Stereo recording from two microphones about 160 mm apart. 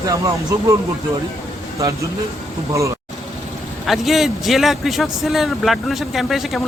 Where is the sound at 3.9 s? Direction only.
Centre (ahead or behind).